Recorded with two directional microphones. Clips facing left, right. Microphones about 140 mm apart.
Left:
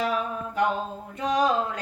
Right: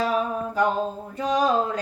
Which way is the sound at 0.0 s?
35° right (ahead or behind).